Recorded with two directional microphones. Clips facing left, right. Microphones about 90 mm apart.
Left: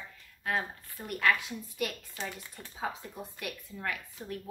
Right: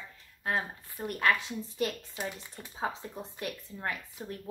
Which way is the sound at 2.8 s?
30° right (ahead or behind).